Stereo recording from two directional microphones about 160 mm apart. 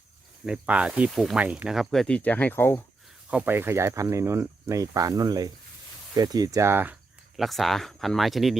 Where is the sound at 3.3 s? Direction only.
10° right (ahead or behind).